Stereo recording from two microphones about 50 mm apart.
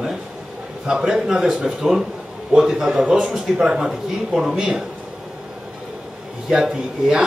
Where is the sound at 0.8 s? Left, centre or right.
Centre.